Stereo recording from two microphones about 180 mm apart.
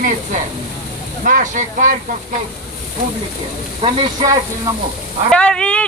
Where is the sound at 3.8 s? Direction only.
30° right (ahead or behind).